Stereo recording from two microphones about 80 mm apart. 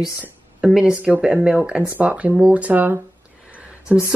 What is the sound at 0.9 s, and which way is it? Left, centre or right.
Speech, centre.